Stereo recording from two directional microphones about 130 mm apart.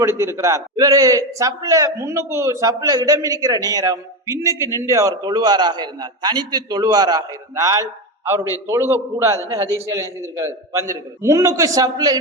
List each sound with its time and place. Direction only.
0.0 s a man's voice: 20° right (ahead or behind)